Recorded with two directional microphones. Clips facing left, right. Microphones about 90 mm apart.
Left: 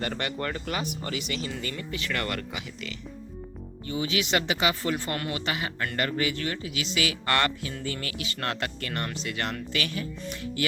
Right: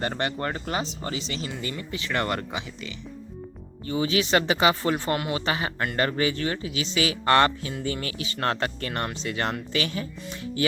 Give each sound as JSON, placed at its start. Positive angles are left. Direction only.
{"t": 0.0, "sound": "a man's voice", "side_deg": -30}
{"t": 5.1, "sound": "speech", "side_deg": -20}
{"t": 5.5, "sound": "a man's voice", "side_deg": -35}